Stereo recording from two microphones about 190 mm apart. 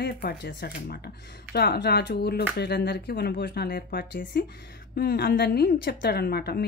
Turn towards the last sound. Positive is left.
turn(degrees=55)  # may be behind; listen again after turning